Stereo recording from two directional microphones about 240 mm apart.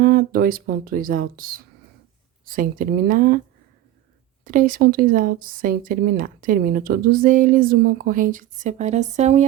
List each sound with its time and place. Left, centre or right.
0.0 s speech: right
4.4 s speech: right